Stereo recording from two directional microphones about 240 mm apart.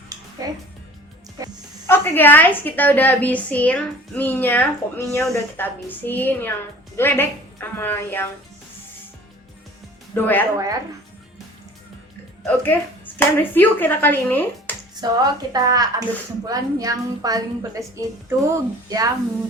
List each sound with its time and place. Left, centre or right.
0.4 s a woman's voice: centre
1.9 s a woman's voice: centre
10.2 s a woman's voice: centre
12.4 s a woman's voice: centre
15.0 s a woman's voice: centre